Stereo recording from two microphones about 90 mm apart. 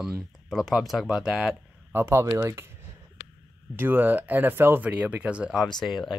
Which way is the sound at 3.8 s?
20° right (ahead or behind).